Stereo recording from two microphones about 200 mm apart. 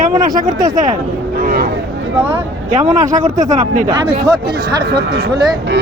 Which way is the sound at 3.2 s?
15° right (ahead or behind).